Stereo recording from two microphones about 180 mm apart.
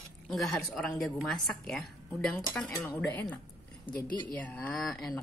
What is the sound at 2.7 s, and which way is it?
Cutlery, 15° left (ahead or behind).